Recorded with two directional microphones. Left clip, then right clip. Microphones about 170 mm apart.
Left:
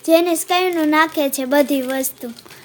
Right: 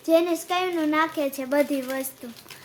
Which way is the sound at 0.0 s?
35° left (ahead or behind).